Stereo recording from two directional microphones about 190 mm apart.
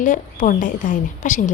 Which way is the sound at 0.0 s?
45° left (ahead or behind).